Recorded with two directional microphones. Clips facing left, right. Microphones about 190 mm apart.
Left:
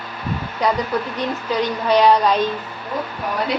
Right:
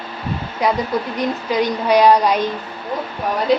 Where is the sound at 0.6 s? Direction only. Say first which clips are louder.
Right 1 dB; 10° right (ahead or behind).